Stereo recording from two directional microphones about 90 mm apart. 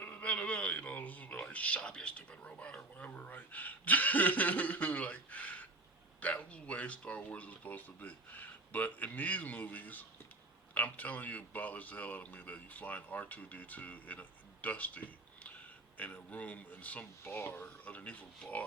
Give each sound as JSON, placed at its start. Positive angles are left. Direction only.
{"t": 0.0, "sound": "a man's voice", "side_deg": 15}